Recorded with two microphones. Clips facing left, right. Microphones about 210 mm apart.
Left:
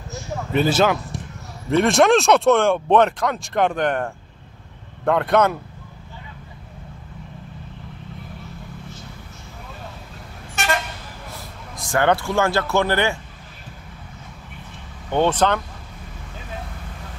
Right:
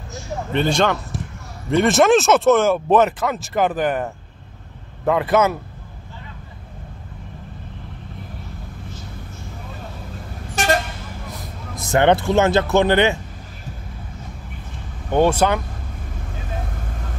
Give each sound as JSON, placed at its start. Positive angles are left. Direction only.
{"t": 0.5, "sound": "speech", "side_deg": 5}
{"t": 10.5, "sound": "vehicle", "side_deg": -35}
{"t": 11.3, "sound": "speech", "side_deg": -20}
{"t": 15.0, "sound": "speech", "side_deg": -10}